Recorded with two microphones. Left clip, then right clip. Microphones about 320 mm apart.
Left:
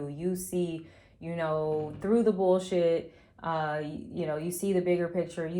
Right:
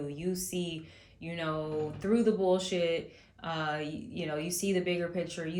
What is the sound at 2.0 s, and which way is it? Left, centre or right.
Speech, centre.